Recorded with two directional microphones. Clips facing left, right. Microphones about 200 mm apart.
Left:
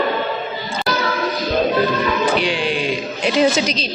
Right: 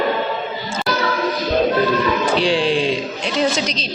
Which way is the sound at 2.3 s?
30° right (ahead or behind).